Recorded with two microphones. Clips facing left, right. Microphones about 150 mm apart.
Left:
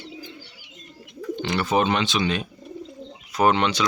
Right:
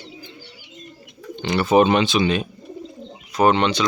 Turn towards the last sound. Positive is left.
turn(degrees=5)  # may be behind; listen again after turning